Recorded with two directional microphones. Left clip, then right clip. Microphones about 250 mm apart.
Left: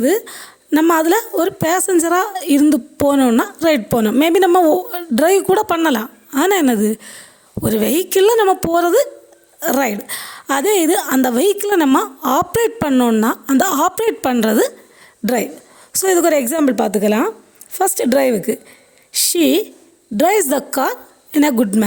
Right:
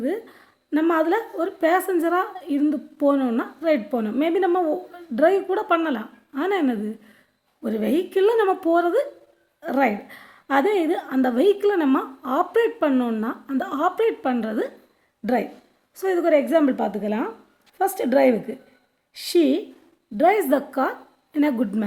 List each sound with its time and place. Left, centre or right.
0.0 s a woman's voice: left
15.9 s a woman's voice: left